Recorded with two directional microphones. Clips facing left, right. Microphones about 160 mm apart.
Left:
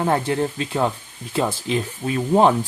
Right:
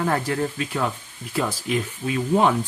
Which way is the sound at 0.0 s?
25° left (ahead or behind).